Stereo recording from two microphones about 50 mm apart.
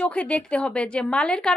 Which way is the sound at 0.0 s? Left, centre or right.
Left.